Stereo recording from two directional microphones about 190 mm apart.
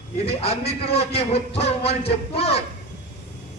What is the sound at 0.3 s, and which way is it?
A man's voice, 30° left (ahead or behind).